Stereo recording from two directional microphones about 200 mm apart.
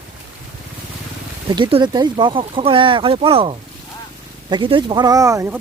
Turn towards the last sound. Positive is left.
turn(degrees=-15)  # may be behind; listen again after turning